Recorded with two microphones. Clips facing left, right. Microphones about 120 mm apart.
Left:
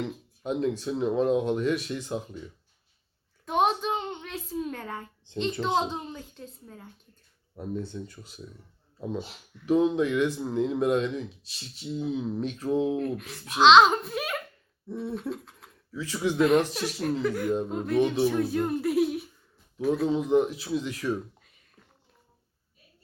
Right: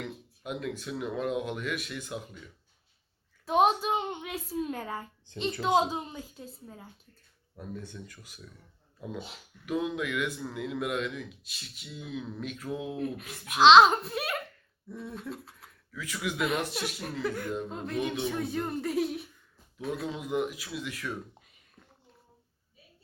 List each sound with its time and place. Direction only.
0.0 s speech: 30° left (ahead or behind)
3.4 s a sound: centre (ahead or behind)
4.5 s a woman's voice: 5° right (ahead or behind)
7.5 s speech: 25° left (ahead or behind)
9.6 s speech: 30° left (ahead or behind)
13.0 s a child's voice: 5° right (ahead or behind)
14.9 s a sound: centre (ahead or behind)
15.9 s speech: 30° left (ahead or behind)
16.4 s a child's voice: centre (ahead or behind)
20.1 s speech: 30° left (ahead or behind)